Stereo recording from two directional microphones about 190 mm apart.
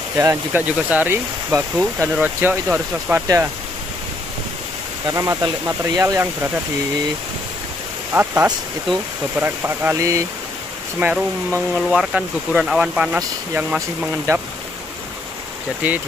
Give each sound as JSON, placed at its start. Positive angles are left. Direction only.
{"t": 0.2, "sound": "speech", "side_deg": -10}
{"t": 5.1, "sound": "speech", "side_deg": -15}
{"t": 8.1, "sound": "speech", "side_deg": -10}
{"t": 15.8, "sound": "speech", "side_deg": -10}